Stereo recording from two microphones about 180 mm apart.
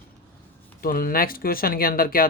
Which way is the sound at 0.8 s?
55° left (ahead or behind).